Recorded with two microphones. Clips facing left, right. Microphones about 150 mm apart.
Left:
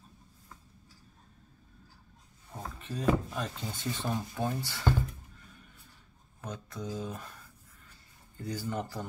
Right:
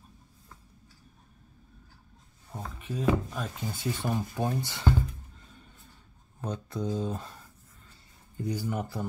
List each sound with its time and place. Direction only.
2.8 s speech: 5° right (ahead or behind)
6.4 s speech: 30° right (ahead or behind)
8.4 s speech: 15° right (ahead or behind)